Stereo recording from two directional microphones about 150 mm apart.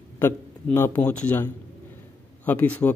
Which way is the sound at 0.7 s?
15° left (ahead or behind).